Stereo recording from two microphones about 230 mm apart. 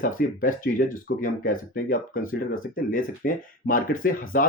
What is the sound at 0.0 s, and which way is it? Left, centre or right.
Speech, left.